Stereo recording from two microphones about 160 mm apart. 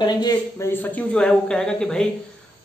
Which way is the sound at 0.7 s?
5° left (ahead or behind).